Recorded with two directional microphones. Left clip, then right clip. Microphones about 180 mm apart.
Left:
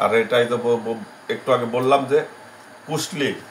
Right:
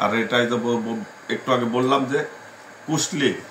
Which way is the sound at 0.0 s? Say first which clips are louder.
Left 3 dB; 20° left (ahead or behind).